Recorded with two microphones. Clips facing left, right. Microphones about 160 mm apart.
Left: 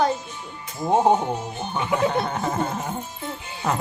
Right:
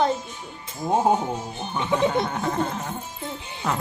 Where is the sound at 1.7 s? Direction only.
5° left (ahead or behind).